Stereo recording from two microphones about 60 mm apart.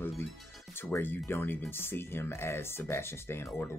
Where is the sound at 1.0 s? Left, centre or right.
Left.